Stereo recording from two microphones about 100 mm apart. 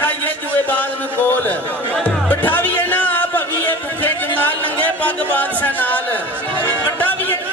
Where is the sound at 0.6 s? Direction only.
20° left (ahead or behind).